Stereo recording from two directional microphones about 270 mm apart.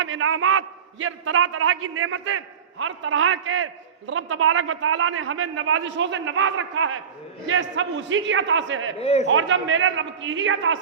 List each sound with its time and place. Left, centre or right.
0.0 s a man's voice: right
9.0 s a man's voice: left
9.2 s a man's voice: right